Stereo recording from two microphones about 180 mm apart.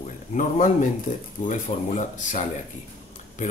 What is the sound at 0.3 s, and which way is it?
Speech, 45° left (ahead or behind).